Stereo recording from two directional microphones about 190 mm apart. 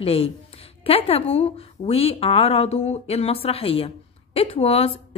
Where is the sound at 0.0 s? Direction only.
30° left (ahead or behind).